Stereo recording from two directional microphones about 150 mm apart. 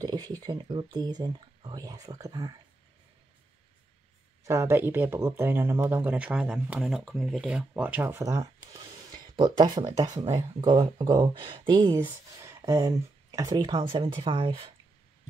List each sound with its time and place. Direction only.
0.0 s speech: 25° right (ahead or behind)
4.5 s speech: 20° right (ahead or behind)
12.4 s speech: 20° right (ahead or behind); by 14.7 s 35° right (ahead or behind)